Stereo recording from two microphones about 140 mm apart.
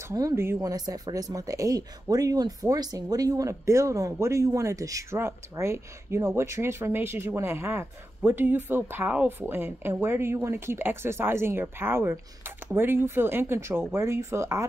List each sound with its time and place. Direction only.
0.1 s speech: 20° right (ahead or behind)